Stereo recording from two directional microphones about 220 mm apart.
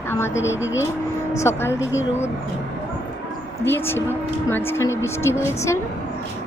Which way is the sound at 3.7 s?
10° left (ahead or behind).